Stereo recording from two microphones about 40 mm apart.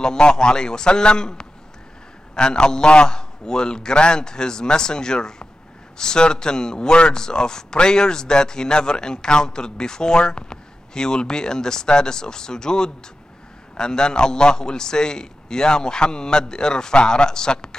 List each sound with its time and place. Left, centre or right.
0.0 s a man's voice: centre